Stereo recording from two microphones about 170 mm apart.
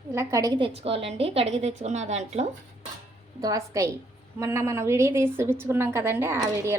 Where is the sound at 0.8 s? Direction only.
35° right (ahead or behind).